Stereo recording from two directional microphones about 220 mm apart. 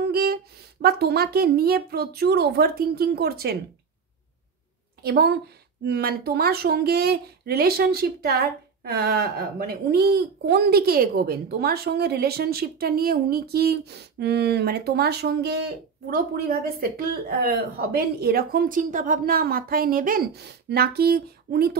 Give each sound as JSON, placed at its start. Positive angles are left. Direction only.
{"t": 0.0, "sound": "speech", "side_deg": -45}
{"t": 5.0, "sound": "speech", "side_deg": -50}